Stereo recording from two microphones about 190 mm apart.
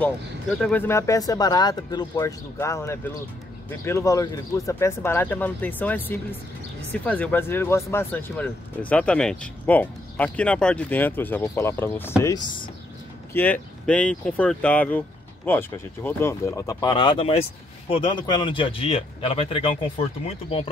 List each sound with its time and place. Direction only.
0.6 s speech: 10° left (ahead or behind)
13.3 s speech: 10° left (ahead or behind); by 20.7 s 30° left (ahead or behind)